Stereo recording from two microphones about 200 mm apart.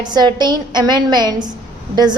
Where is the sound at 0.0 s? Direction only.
20° right (ahead or behind).